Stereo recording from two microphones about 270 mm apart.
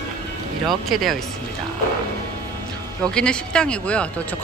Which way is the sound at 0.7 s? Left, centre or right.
Centre.